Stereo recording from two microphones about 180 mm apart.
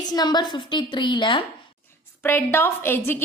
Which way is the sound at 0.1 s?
20° left (ahead or behind).